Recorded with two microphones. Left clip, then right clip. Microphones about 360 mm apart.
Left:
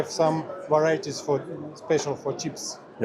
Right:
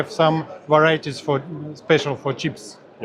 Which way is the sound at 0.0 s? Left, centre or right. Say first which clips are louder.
Right 5 dB; right.